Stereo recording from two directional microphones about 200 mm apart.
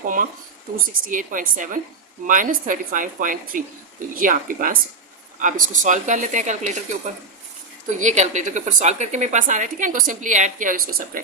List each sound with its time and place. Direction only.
0.0 s a woman's voice: 40° right (ahead or behind)
7.9 s a woman's voice: 35° right (ahead or behind)